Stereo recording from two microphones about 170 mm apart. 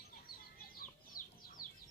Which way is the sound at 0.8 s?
55° left (ahead or behind).